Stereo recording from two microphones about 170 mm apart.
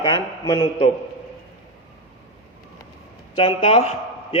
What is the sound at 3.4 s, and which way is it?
A man's voice, 35° left (ahead or behind).